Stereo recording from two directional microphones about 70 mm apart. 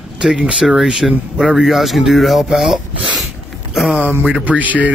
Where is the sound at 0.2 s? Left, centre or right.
Centre.